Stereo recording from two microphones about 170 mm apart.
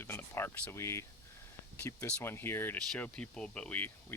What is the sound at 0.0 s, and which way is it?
Speech, 15° left (ahead or behind).